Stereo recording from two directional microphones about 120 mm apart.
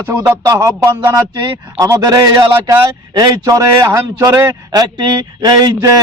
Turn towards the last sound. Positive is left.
turn(degrees=-35)  # may be behind; listen again after turning